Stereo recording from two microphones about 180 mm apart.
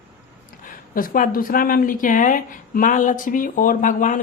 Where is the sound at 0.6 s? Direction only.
50° left (ahead or behind).